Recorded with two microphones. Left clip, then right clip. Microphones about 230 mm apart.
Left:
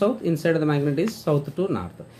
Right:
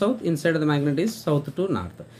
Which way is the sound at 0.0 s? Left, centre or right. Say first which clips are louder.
Left 1 dB; centre.